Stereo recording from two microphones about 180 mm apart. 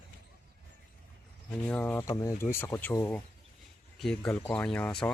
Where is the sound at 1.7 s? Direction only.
10° left (ahead or behind).